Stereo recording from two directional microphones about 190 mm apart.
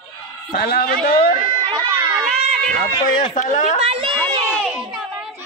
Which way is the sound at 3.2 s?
40° left (ahead or behind).